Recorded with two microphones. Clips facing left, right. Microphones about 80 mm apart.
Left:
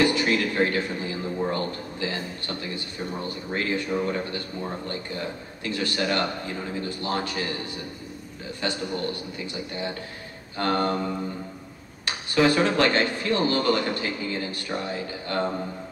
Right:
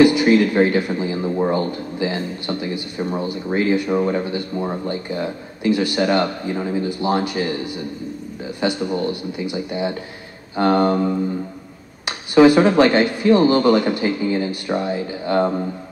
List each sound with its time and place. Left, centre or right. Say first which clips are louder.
0.0 s a sound: right 9 dB; centre
0.6 s a man's voice: right 7 dB; centre
5.6 s a man's voice: right 9 dB; centre
8.5 s a man's voice: right 8 dB; centre
12.4 s a man's voice: right 9 dB; centre